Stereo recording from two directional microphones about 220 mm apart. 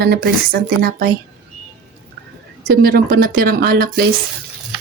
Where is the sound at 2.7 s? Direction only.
45° right (ahead or behind).